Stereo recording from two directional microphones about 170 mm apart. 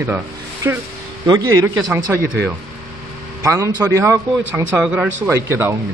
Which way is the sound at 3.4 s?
20° right (ahead or behind).